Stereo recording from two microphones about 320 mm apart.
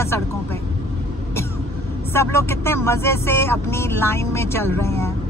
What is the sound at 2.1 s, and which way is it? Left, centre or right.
Speech, centre.